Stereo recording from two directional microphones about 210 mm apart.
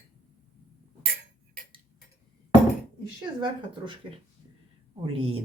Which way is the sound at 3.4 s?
20° right (ahead or behind).